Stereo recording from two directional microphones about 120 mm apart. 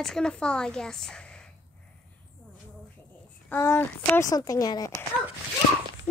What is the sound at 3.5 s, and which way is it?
Speech, 20° left (ahead or behind).